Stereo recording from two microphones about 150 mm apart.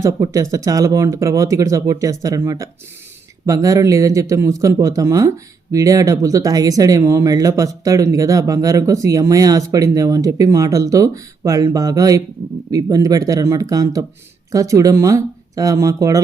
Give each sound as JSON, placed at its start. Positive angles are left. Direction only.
{"t": 0.0, "sound": "speech", "side_deg": -25}